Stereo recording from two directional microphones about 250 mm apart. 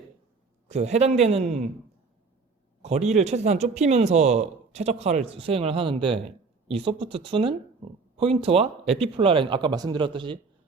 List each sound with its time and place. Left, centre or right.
0.7 s speech: right
2.8 s speech: right